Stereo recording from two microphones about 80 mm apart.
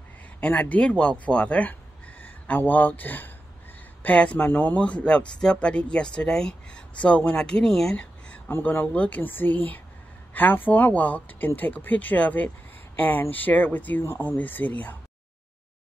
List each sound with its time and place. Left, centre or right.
0.4 s speech: left
7.9 s a sound: centre
8.5 s speech: left
8.8 s speech: centre